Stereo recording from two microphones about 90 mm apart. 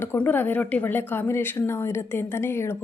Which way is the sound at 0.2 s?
20° left (ahead or behind).